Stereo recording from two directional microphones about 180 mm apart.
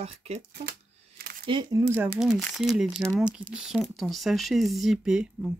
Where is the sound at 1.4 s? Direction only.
25° right (ahead or behind).